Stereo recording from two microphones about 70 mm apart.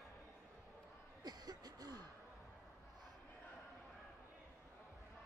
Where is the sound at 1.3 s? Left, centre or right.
Right.